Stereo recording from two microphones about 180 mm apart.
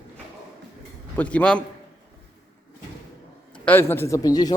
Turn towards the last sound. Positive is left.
turn(degrees=20)  # may be behind; listen again after turning